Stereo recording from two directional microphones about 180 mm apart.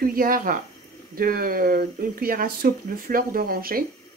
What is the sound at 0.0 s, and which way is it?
Speech, 55° right (ahead or behind).